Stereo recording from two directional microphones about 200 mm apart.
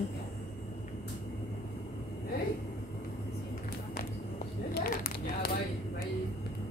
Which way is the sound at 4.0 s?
45° left (ahead or behind).